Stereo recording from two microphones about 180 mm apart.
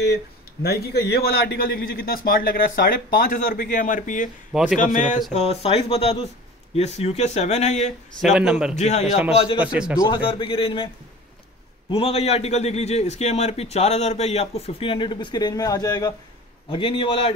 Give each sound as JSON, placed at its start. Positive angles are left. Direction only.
{"t": 0.0, "sound": "a man's voice", "side_deg": 65}
{"t": 4.5, "sound": "a man's voice", "side_deg": -5}
{"t": 4.7, "sound": "a man's voice", "side_deg": 45}
{"t": 8.2, "sound": "a man's voice", "side_deg": 0}
{"t": 8.7, "sound": "a man's voice", "side_deg": 40}
{"t": 9.0, "sound": "a man's voice", "side_deg": -5}
{"t": 9.9, "sound": "a man's voice", "side_deg": 25}
{"t": 11.9, "sound": "a man's voice", "side_deg": 35}